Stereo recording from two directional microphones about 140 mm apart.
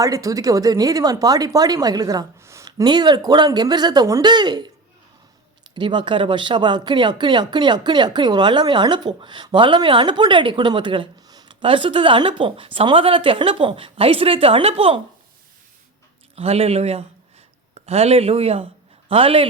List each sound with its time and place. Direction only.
0.0 s speech: 25° right (ahead or behind)
5.7 s speech: 35° right (ahead or behind)
16.3 s speech: 45° right (ahead or behind)